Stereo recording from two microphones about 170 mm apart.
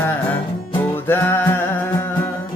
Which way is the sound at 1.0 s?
15° left (ahead or behind).